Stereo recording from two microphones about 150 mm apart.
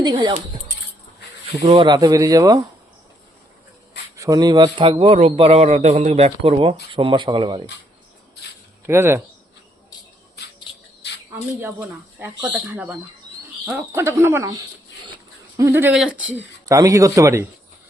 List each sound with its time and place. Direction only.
0.0 s speech: 30° right (ahead or behind)
1.6 s speech: 35° right (ahead or behind)
4.2 s a man's voice: 25° right (ahead or behind)
8.9 s speech: 15° right (ahead or behind)
10.4 s a sound: 90° left
11.6 s speech: 15° right (ahead or behind)
15.9 s speech: 5° right (ahead or behind)
16.6 s speech: 20° right (ahead or behind)